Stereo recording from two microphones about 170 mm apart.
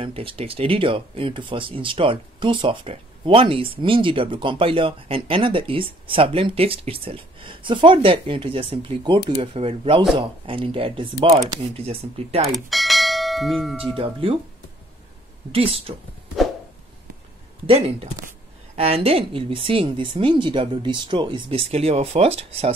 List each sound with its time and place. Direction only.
0.0 s speech: 30° right (ahead or behind)
12.5 s bell: centre (ahead or behind)
13.9 s speech: 30° right (ahead or behind)
15.5 s speech: 35° right (ahead or behind)
17.6 s speech: 35° right (ahead or behind)